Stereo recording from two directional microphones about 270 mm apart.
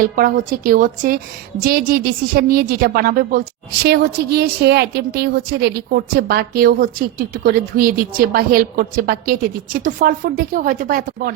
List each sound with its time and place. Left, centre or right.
0.0 s a woman's voice: right